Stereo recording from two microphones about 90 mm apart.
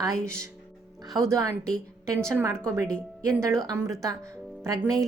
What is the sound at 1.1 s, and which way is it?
Speech, 35° right (ahead or behind).